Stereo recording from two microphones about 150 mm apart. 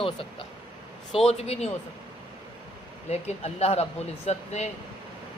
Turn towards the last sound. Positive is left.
turn(degrees=50)  # may be behind; listen again after turning